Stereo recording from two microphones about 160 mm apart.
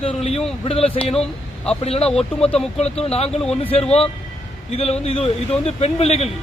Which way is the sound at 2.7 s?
40° left (ahead or behind).